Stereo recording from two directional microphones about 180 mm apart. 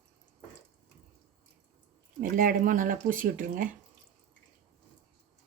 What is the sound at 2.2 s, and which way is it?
Speech, 50° right (ahead or behind).